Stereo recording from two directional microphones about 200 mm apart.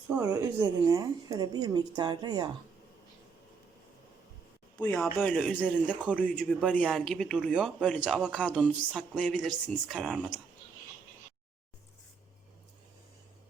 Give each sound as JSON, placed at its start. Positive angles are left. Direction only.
{"t": 0.1, "sound": "a woman's voice", "side_deg": -15}
{"t": 4.9, "sound": "speech", "side_deg": 5}